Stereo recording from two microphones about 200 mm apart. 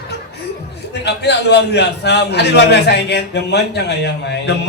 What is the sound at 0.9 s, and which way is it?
A man's voice, 60° left (ahead or behind).